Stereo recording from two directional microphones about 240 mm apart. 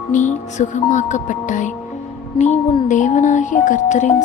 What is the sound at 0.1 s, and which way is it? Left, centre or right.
A woman's voice, left.